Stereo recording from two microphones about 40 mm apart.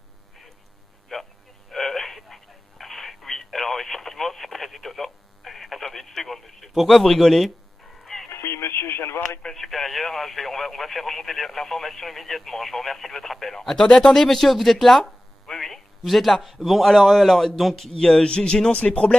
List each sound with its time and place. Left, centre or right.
1.1 s a sound: centre
6.9 s chicken: centre
8.3 s radio: left
9.6 s radio: centre
14.1 s speech: centre
18.2 s speech: left